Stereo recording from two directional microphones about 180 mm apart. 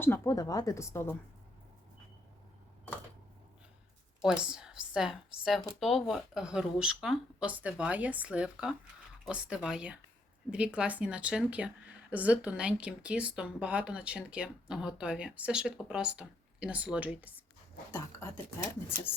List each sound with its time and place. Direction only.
0.0 s speech: 15° left (ahead or behind)
4.2 s speech: 5° right (ahead or behind)
17.9 s speech: 15° left (ahead or behind)